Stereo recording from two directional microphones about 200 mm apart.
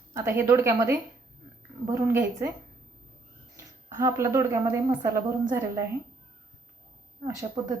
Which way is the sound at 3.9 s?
15° right (ahead or behind).